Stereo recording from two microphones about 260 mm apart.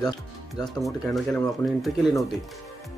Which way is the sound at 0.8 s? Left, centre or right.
Centre.